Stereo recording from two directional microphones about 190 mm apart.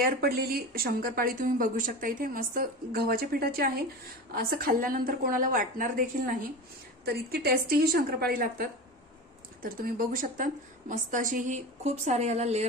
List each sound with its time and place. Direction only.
0.0 s speech: 50° right (ahead or behind); by 12.6 s 35° right (ahead or behind)